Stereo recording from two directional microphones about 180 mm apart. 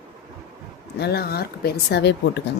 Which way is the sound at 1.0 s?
60° left (ahead or behind).